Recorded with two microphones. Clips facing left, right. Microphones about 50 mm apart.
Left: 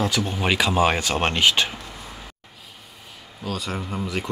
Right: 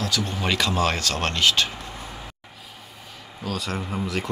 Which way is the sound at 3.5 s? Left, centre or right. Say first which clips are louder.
Even; centre.